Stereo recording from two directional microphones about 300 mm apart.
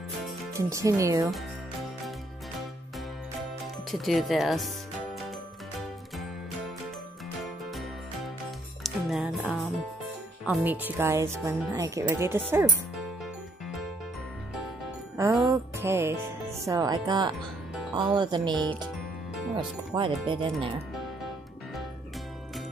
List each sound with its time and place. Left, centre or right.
0.5 s speech: centre
3.9 s speech: centre
8.8 s music: centre
10.4 s speech: centre
15.1 s music: centre
16.6 s speech: centre